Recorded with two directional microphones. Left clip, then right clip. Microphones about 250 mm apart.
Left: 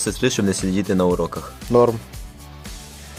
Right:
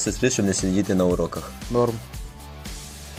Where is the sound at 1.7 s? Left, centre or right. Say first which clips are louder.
Left 7 dB; left.